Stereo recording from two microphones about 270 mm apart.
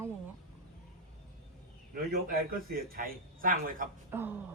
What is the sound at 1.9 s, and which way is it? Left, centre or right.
A man's voice, right.